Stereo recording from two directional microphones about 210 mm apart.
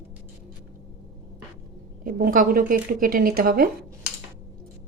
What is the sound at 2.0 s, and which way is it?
Speech, 40° right (ahead or behind).